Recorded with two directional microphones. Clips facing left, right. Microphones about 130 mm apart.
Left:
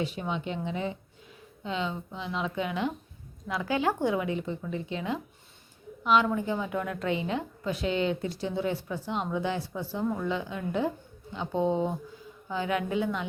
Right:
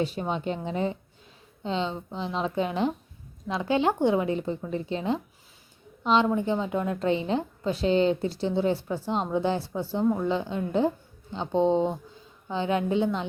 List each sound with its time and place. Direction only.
0.0 s a woman's voice: 35° right (ahead or behind)
3.4 s a woman's voice: 25° right (ahead or behind)